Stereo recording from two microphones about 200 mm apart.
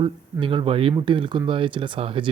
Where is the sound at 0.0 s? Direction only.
25° right (ahead or behind).